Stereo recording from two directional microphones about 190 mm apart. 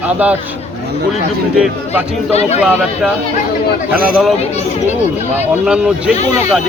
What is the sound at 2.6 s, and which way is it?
Speech, 5° right (ahead or behind).